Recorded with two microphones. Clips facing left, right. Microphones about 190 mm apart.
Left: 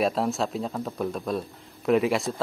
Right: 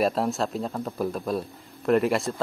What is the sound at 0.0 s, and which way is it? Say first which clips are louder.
Speech: right 1 dB; centre (ahead or behind).